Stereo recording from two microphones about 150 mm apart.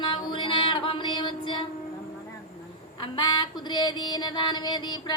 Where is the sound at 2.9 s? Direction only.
30° left (ahead or behind).